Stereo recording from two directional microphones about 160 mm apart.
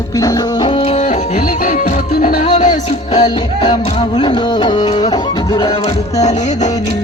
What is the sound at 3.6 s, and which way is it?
Music, 35° left (ahead or behind).